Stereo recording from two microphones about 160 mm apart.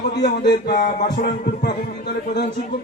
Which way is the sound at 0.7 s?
55° left (ahead or behind).